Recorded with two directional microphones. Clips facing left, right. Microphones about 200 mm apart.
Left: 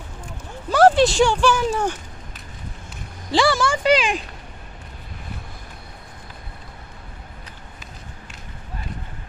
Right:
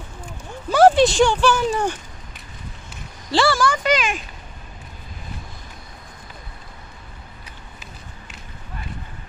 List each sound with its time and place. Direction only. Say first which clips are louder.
0.7 s speech: right 1 dB; centre (ahead or behind)
3.3 s speech: even; 20° left (ahead or behind)